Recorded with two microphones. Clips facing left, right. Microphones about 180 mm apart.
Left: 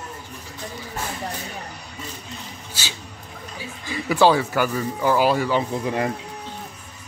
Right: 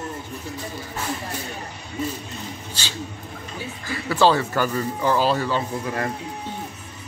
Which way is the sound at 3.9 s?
15° left (ahead or behind).